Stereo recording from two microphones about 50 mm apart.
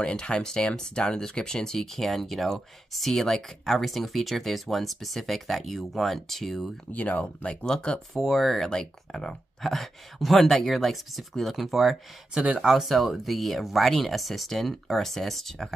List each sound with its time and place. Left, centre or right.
0.0 s speech: centre
6.9 s speech: left
7.4 s speech: centre
8.1 s speech: centre
12.5 s speech: centre
12.8 s speech: centre